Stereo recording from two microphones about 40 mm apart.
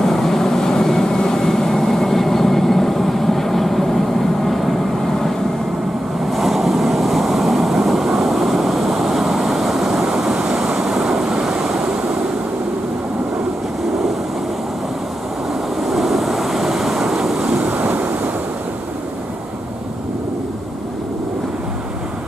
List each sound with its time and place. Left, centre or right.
0.0 s vehicle: centre
6.3 s vehicle: centre
15.9 s waves: centre
17.8 s waves: right